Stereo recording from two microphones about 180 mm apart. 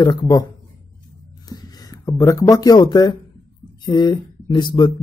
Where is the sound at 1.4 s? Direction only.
20° left (ahead or behind).